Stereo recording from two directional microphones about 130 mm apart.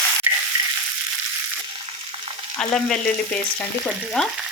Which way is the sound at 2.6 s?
5° left (ahead or behind).